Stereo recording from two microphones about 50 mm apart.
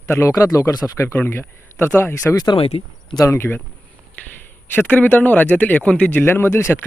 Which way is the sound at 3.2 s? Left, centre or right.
Left.